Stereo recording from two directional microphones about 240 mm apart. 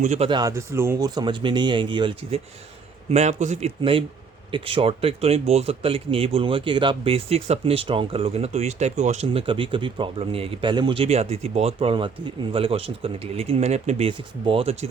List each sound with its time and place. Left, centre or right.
0.0 s speech: right